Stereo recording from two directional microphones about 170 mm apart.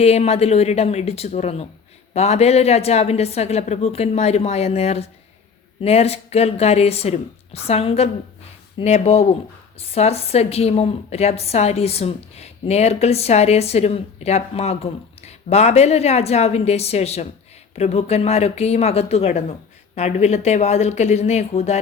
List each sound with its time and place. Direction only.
0.0 s a woman's voice: 40° left (ahead or behind)